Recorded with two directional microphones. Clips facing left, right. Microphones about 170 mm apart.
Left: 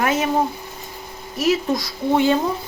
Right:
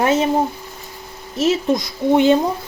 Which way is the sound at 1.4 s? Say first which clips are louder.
Right 2 dB; 20° right (ahead or behind).